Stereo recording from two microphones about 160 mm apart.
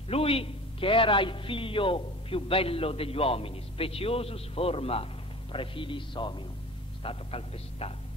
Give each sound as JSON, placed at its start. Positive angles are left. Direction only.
{"t": 0.1, "sound": "a man's voice", "side_deg": 35}